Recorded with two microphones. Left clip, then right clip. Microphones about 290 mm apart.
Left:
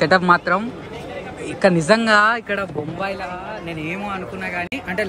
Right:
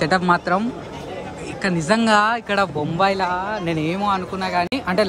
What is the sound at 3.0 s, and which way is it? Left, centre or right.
Speech, centre.